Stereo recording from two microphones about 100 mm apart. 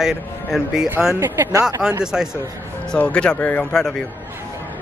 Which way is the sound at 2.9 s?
10° left (ahead or behind).